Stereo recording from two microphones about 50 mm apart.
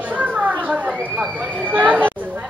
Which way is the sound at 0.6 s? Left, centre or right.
Right.